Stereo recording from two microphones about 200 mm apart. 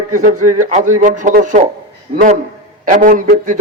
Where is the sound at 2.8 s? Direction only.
40° right (ahead or behind).